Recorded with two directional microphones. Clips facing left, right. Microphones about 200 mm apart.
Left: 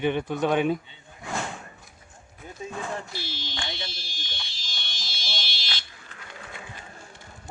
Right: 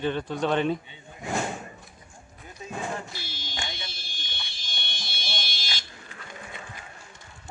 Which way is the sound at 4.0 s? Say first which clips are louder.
Left 2 dB; 55° right (ahead or behind).